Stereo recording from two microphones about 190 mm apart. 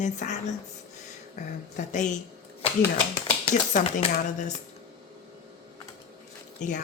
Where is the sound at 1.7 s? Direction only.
40° left (ahead or behind).